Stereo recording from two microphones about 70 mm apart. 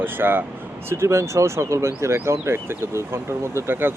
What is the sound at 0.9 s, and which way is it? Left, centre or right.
Speech, right.